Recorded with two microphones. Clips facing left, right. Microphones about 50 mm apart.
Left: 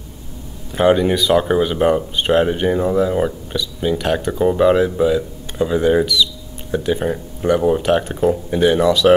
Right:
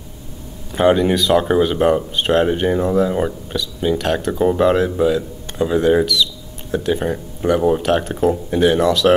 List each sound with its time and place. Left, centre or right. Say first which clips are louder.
0.7 s speech: even; centre